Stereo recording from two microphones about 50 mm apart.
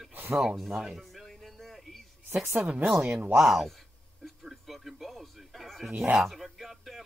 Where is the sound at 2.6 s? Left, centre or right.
Right.